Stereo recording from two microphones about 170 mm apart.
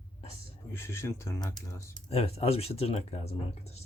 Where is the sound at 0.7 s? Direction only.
15° left (ahead or behind).